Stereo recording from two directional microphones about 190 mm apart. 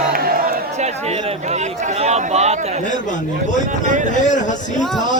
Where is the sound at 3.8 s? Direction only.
40° right (ahead or behind).